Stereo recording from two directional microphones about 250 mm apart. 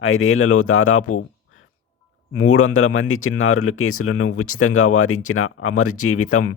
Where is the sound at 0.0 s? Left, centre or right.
Left.